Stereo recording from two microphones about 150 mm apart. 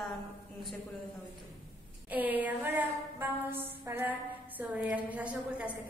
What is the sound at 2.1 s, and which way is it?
A woman's voice, 10° right (ahead or behind).